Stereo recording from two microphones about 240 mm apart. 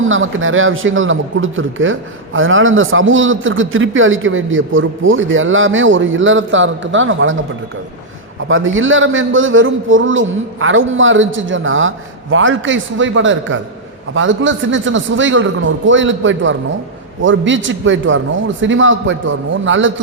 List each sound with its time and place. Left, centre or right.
0.0 s a man's voice: right
8.4 s a man's voice: right